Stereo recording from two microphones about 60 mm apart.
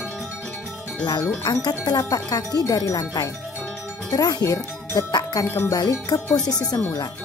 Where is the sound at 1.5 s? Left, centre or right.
Left.